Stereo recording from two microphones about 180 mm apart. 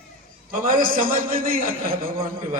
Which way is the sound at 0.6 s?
50° right (ahead or behind).